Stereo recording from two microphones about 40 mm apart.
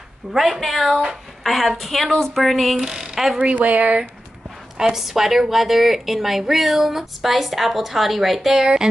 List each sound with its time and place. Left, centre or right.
0.3 s a woman's voice: centre
2.8 s speech: centre
3.5 s speech: right
4.7 s a woman's voice: centre